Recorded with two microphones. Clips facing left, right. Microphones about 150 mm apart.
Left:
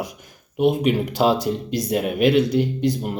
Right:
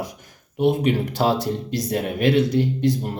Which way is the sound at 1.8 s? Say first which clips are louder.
Left 2 dB; 10° left (ahead or behind).